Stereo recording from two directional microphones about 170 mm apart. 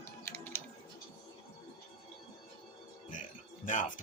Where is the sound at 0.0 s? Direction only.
15° left (ahead or behind).